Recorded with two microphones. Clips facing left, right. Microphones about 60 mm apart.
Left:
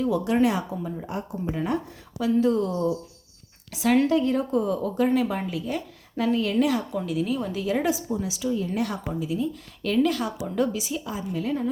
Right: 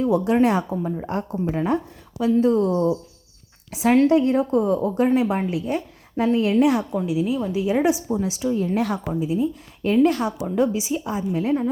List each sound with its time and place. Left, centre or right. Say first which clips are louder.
0.0 s a woman's voice: right 4 dB; right
0.4 s speech: right 4 dB; right
1.0 s speech: right 5 dB; right
1.5 s a woman's voice: right 4 dB; right
7.1 s a woman's voice: right 3 dB; centre
7.6 s a woman's voice: right 5 dB; centre
8.1 s speech: right 4 dB; right
9.2 s a woman's voice: right 4 dB; right
10.4 s a woman's voice: right 4 dB; right